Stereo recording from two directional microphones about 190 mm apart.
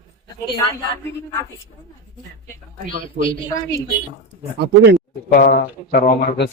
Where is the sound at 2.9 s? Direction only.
45° right (ahead or behind).